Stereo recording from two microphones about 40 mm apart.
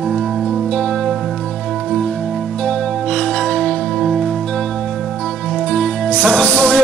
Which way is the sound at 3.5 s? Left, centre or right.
Left.